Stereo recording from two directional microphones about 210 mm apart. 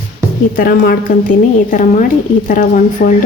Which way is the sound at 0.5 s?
45° left (ahead or behind).